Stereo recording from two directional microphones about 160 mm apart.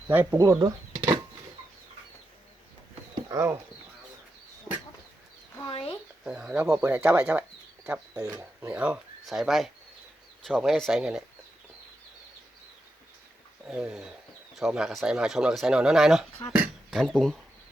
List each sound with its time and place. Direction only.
0.1 s speech: 10° right (ahead or behind)
3.2 s speech: 20° right (ahead or behind)
5.6 s a sound: 35° left (ahead or behind)
6.2 s speech: 5° right (ahead or behind)
8.3 s speech: 20° right (ahead or behind)
8.7 s speech: 5° right (ahead or behind)
13.7 s speech: 5° right (ahead or behind)